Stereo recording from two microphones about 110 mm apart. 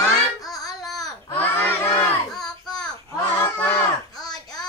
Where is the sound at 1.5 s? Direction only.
20° left (ahead or behind).